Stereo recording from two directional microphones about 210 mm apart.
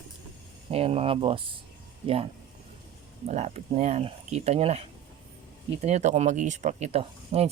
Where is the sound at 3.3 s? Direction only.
30° right (ahead or behind).